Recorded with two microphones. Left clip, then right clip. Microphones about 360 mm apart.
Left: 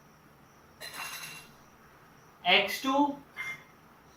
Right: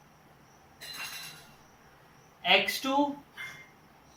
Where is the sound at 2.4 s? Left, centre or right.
Centre.